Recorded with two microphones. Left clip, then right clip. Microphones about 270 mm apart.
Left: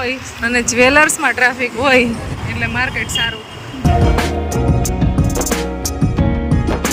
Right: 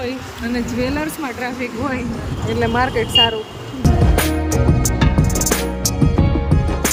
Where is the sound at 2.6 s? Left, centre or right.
Centre.